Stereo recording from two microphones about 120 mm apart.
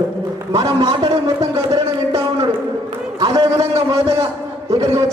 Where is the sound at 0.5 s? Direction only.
50° right (ahead or behind).